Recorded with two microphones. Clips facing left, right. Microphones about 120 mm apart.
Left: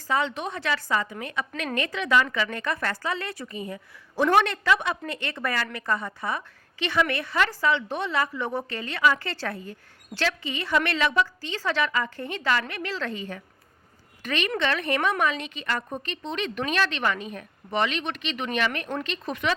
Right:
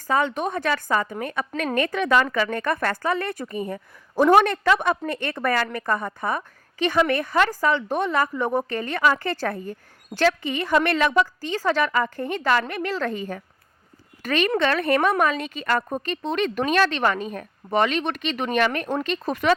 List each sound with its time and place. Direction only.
0.1 s a woman's voice: 45° right (ahead or behind)